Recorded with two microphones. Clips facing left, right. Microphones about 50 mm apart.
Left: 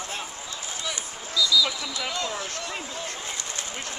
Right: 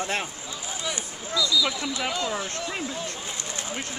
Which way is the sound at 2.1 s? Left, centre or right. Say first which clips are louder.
Right 2 dB; centre.